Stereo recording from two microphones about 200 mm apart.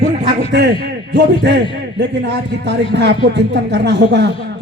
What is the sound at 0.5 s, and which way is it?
Speech, 60° right (ahead or behind).